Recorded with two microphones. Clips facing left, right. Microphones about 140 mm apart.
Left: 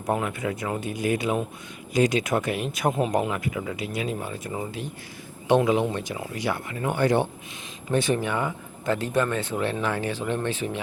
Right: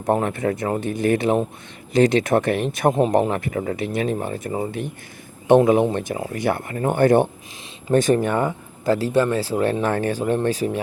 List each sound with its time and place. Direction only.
0.0 s speech: 40° right (ahead or behind)
0.3 s speech: 55° right (ahead or behind)
3.2 s speech: 40° right (ahead or behind)